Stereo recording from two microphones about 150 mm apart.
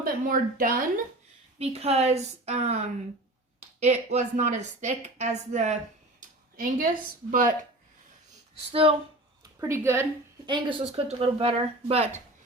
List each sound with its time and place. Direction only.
0.0 s a woman's voice: 70° right (ahead or behind)
1.5 s speech: 45° right (ahead or behind)
6.1 s a sound: 75° right (ahead or behind)
7.3 s speech: 65° right (ahead or behind)
8.7 s speech: 40° right (ahead or behind)
9.4 s speech: 20° right (ahead or behind)
10.4 s speech: 30° right (ahead or behind)